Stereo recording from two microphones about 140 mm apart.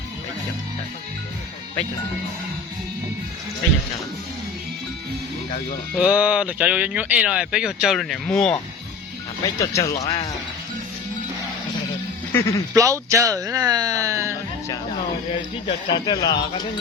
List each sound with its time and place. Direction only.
6.0 s speech: 10° right (ahead or behind)
9.6 s speech: 25° left (ahead or behind)
12.3 s speech: 20° left (ahead or behind)
12.7 s speech: 25° right (ahead or behind)
15.9 s speech: 30° left (ahead or behind)